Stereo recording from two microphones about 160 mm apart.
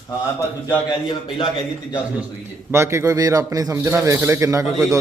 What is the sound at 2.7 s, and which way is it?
A man's voice, 15° right (ahead or behind).